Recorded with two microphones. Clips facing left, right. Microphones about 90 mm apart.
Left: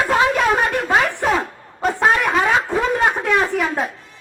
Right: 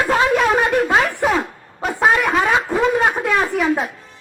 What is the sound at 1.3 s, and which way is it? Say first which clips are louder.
Snicker: even; 5° right (ahead or behind).